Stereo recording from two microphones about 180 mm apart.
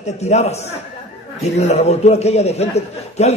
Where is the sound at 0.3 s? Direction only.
35° left (ahead or behind).